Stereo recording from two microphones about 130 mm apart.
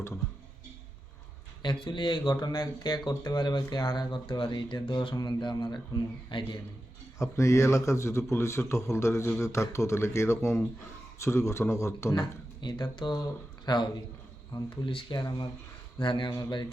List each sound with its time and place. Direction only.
1.6 s speech: 35° left (ahead or behind)
7.2 s a man's voice: 25° left (ahead or behind)
12.6 s speech: 35° left (ahead or behind)